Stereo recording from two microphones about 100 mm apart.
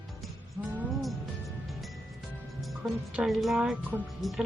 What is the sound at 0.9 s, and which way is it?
Music, centre (ahead or behind).